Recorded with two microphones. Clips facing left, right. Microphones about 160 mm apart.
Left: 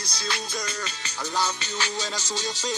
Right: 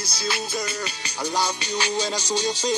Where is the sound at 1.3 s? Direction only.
15° right (ahead or behind).